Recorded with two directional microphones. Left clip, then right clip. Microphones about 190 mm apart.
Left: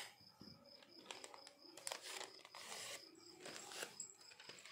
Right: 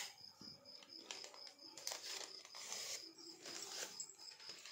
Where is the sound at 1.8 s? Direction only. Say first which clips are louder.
Right 2 dB; 45° left (ahead or behind).